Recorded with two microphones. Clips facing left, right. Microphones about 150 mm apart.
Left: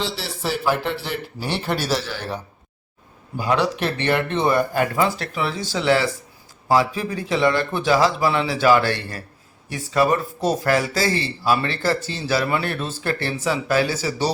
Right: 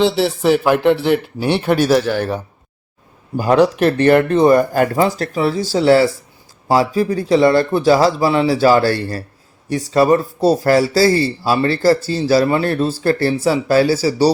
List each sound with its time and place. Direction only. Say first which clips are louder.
0.0 s a man's voice: right 12 dB; 60° right (ahead or behind); by 14.3 s 35° right (ahead or behind)